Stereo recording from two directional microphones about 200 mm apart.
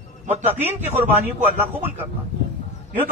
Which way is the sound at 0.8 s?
10° right (ahead or behind).